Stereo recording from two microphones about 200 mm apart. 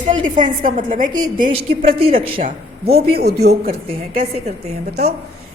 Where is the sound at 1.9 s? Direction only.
45° right (ahead or behind).